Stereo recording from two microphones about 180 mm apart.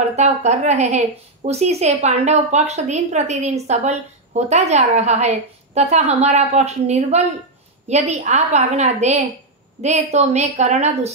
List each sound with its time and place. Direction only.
0.1 s a woman's voice: 40° right (ahead or behind)